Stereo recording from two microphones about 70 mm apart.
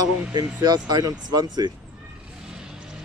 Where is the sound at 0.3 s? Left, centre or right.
Right.